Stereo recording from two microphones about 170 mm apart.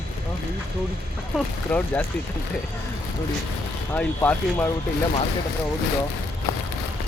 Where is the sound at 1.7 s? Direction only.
10° left (ahead or behind).